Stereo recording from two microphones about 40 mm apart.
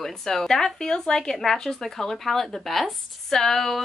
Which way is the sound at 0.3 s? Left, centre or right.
Centre.